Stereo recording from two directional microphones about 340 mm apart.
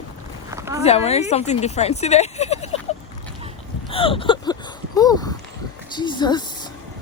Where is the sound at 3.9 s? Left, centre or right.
Centre.